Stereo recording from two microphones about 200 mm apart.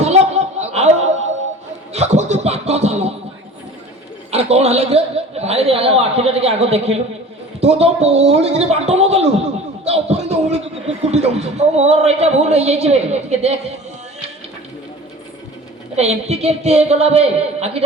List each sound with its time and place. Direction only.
0.0 s a sound: 35° right (ahead or behind)
4.3 s a man's voice: 30° right (ahead or behind)
16.0 s speech: 30° right (ahead or behind)